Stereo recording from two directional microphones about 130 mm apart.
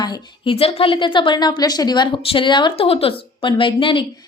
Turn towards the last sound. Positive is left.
turn(degrees=40)  # may be behind; listen again after turning